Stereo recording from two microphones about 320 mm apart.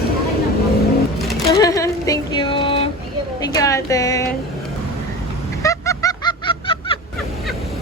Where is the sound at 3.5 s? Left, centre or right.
Centre.